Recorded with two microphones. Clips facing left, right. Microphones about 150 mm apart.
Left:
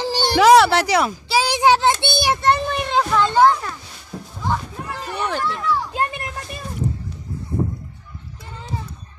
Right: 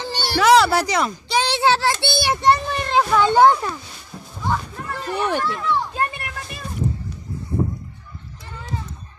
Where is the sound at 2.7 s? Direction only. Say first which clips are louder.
Right 1 dB; centre (ahead or behind).